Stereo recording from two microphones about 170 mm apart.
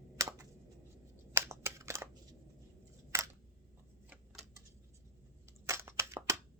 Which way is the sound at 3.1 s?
15° right (ahead or behind).